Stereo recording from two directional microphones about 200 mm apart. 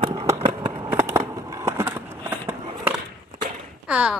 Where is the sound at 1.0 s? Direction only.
15° right (ahead or behind).